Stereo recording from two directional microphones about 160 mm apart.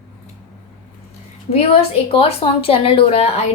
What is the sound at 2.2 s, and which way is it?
A woman's voice, 35° left (ahead or behind).